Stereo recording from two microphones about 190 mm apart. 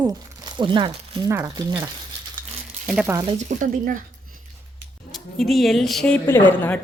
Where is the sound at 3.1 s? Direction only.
20° right (ahead or behind).